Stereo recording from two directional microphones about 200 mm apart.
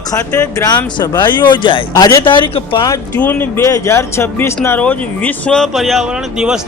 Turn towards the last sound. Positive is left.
turn(degrees=-5)  # may be behind; listen again after turning